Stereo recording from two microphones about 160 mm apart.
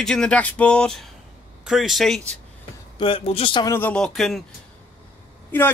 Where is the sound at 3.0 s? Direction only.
35° left (ahead or behind).